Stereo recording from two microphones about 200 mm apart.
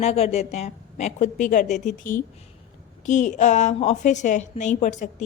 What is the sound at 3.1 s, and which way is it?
A woman's voice, 35° left (ahead or behind).